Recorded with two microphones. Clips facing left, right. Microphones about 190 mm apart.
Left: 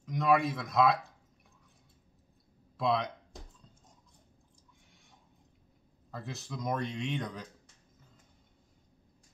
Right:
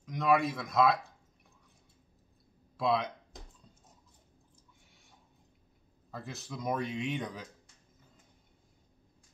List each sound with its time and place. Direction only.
0.0 s a man's voice: centre (ahead or behind)
2.8 s speech: centre (ahead or behind)
6.1 s speech: centre (ahead or behind)